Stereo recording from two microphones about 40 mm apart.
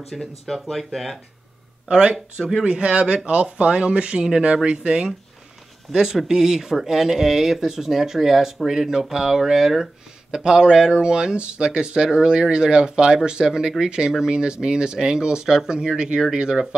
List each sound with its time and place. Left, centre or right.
0.1 s speech: centre
1.9 s speech: right
5.9 s speech: centre